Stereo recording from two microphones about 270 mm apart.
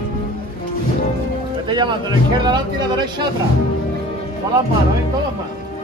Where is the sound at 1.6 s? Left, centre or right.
Centre.